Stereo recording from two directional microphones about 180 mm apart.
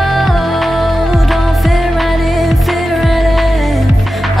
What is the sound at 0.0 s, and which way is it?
Music, centre (ahead or behind).